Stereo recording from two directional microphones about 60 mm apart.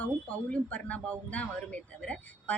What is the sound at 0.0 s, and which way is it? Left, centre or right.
A woman's voice, left.